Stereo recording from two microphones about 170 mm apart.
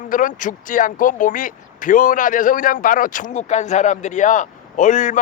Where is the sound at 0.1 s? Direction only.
50° left (ahead or behind).